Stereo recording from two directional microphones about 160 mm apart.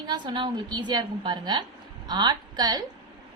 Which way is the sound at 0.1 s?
30° right (ahead or behind).